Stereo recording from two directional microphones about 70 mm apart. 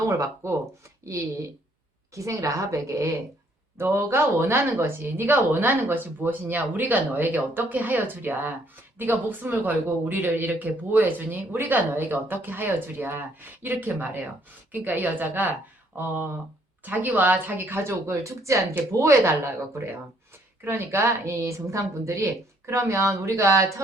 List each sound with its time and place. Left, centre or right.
0.0 s a woman's voice: right
3.8 s a woman's voice: right
20.7 s a woman's voice: right